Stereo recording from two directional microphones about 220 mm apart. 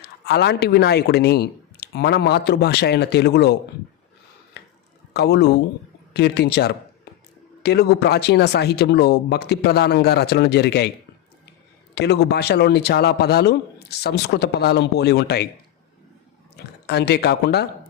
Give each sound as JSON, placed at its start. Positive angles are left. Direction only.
{"t": 0.0, "sound": "speech", "side_deg": 50}
{"t": 4.6, "sound": "a sound", "side_deg": 50}
{"t": 5.1, "sound": "speech", "side_deg": 50}
{"t": 11.9, "sound": "speech", "side_deg": 50}
{"t": 16.6, "sound": "speech", "side_deg": 50}